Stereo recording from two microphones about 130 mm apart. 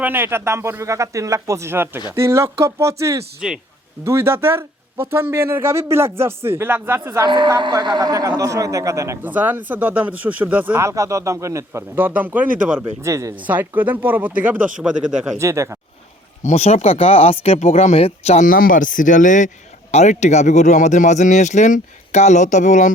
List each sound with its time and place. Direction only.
0.0 s speech: 15° right (ahead or behind)
7.3 s a woman's voice: 35° right (ahead or behind)
13.4 s speech: 15° right (ahead or behind)
15.4 s speech: 20° right (ahead or behind)
16.4 s speech: 60° left (ahead or behind)
18.3 s speech: 90° left
19.9 s speech: 60° left (ahead or behind)